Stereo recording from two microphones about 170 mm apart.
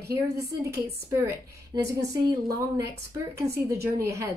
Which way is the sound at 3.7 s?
15° right (ahead or behind).